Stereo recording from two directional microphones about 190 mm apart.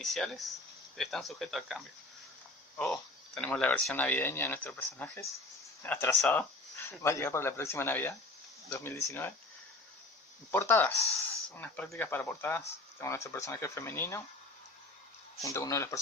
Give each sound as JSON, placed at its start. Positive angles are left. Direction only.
{"t": 0.0, "sound": "speech", "side_deg": 0}
{"t": 10.5, "sound": "speech", "side_deg": 10}
{"t": 15.4, "sound": "speech", "side_deg": 15}